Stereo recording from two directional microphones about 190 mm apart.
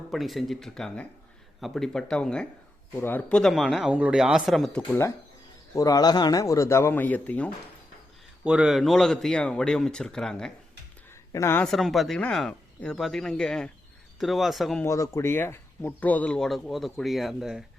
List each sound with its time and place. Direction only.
0.1 s speech: centre (ahead or behind)
4.9 s speech: 15° left (ahead or behind)
8.4 s speech: 5° right (ahead or behind)
11.3 s speech: 15° left (ahead or behind)
14.8 s speech: 15° left (ahead or behind); by 17.6 s centre (ahead or behind)